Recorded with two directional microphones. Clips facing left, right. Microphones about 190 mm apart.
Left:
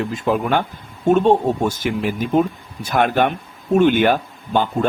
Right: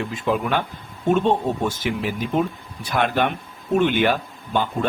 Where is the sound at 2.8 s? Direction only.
45° left (ahead or behind).